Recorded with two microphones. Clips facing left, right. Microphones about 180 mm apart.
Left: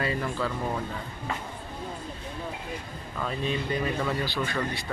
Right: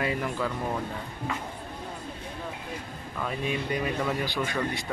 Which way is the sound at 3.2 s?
10° right (ahead or behind).